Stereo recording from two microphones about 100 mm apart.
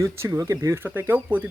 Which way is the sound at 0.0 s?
30° right (ahead or behind).